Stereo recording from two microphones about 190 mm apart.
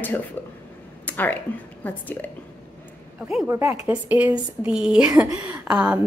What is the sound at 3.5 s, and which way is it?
A woman's voice, 15° right (ahead or behind).